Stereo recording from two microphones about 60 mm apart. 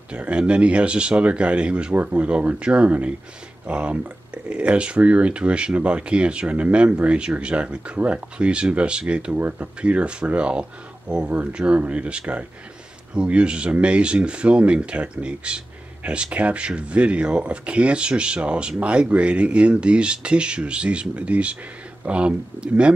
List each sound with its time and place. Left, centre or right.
0.1 s speech: centre